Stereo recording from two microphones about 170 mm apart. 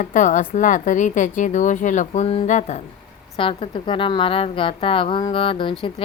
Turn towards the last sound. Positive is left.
turn(degrees=30)  # may be behind; listen again after turning